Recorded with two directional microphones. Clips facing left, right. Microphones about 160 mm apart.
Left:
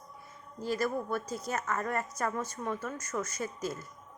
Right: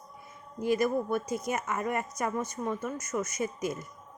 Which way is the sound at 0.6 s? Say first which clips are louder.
Right 5 dB; 15° right (ahead or behind).